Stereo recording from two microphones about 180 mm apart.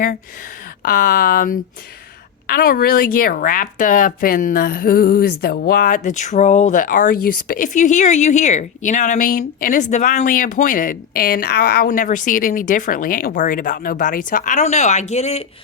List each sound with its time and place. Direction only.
0.8 s speech: 55° left (ahead or behind); by 15.4 s 35° left (ahead or behind)